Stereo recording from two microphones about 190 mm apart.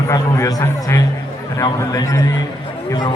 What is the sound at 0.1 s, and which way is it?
A man's voice, 20° left (ahead or behind).